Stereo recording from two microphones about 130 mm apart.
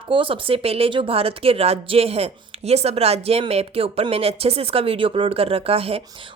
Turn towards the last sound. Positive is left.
turn(degrees=-50)  # may be behind; listen again after turning